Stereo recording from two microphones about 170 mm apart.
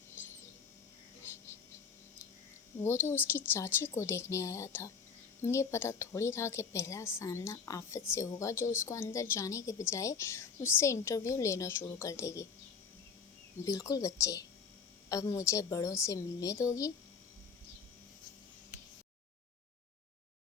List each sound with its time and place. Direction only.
2.8 s a woman's voice: 15° left (ahead or behind)
13.7 s a woman's voice: 20° left (ahead or behind)